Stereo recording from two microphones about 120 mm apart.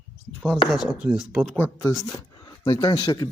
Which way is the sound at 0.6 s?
5° right (ahead or behind).